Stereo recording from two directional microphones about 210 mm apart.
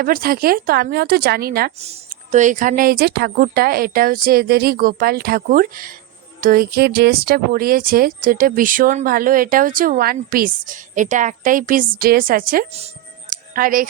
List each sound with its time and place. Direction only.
0.0 s speech: 45° right (ahead or behind)
1.8 s speech: 30° right (ahead or behind)
13.3 s music: 40° right (ahead or behind)